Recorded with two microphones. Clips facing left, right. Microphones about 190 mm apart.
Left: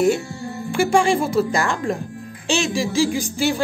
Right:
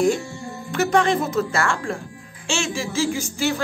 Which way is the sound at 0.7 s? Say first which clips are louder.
Left 2 dB; 10° left (ahead or behind).